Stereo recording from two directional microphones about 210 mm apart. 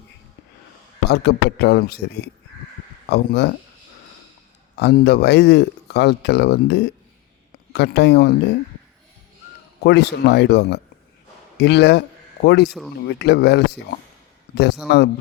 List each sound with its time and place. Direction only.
1.0 s speech: 50° left (ahead or behind)
4.8 s speech: 50° left (ahead or behind)
9.8 s speech: 50° left (ahead or behind)
14.8 s speech: 50° left (ahead or behind)